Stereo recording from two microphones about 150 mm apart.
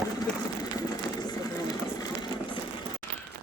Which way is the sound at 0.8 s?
25° left (ahead or behind).